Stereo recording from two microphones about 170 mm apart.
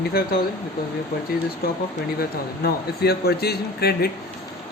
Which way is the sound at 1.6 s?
60° left (ahead or behind).